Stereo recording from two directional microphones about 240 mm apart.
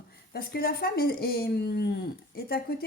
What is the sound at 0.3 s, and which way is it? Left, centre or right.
A woman's voice, left.